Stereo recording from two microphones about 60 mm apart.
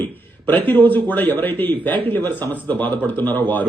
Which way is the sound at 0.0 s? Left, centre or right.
Left.